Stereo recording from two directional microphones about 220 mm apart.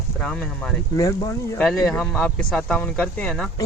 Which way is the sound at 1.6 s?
Centre (ahead or behind).